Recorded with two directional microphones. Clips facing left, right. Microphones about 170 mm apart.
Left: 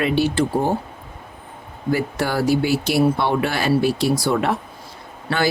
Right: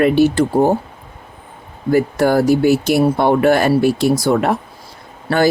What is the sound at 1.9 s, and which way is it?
Speech, 45° right (ahead or behind).